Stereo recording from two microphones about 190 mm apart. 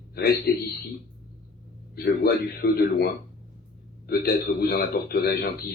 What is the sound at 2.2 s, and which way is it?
A man's voice, 55° left (ahead or behind).